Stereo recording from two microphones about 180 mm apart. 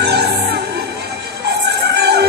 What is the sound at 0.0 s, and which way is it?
Music, 65° right (ahead or behind).